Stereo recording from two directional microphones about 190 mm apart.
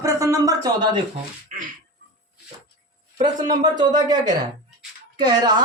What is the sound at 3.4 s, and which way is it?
Speech, 20° right (ahead or behind).